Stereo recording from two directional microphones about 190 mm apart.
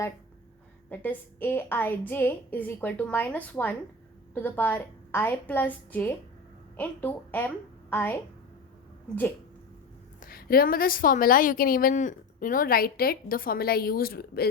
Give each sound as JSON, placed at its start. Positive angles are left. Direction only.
{"t": 0.9, "sound": "a woman's voice", "side_deg": 10}
{"t": 10.2, "sound": "a woman's voice", "side_deg": 50}